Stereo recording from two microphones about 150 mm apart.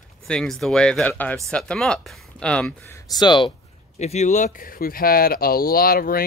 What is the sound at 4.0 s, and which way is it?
Speech, 50° left (ahead or behind).